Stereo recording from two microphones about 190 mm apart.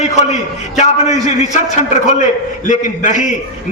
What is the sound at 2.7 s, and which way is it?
Speech, 40° left (ahead or behind).